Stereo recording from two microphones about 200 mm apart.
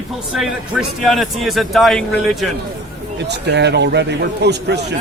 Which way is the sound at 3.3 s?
60° right (ahead or behind).